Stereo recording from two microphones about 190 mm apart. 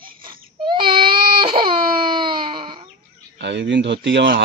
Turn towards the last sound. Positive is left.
turn(degrees=-65)  # may be behind; listen again after turning